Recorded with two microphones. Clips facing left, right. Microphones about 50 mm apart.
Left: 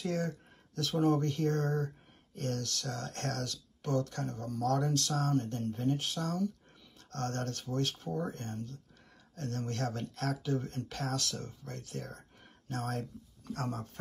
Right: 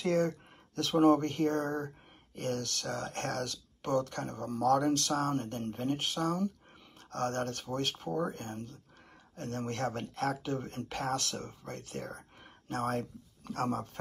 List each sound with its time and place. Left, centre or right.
0.0 s speech: right